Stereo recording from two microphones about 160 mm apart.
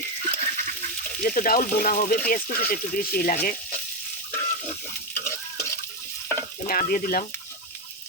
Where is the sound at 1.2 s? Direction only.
60° left (ahead or behind).